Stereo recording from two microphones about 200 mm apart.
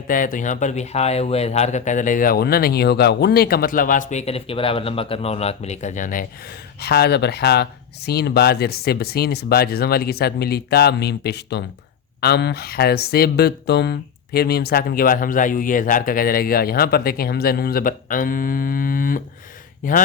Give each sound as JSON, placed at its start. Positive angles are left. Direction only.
{"t": 0.1, "sound": "speech", "side_deg": 40}
{"t": 6.7, "sound": "speech", "side_deg": 50}